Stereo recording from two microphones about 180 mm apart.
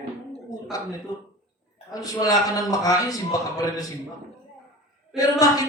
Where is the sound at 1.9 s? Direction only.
20° left (ahead or behind).